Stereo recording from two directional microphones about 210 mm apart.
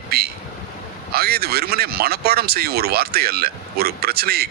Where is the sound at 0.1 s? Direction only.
50° right (ahead or behind).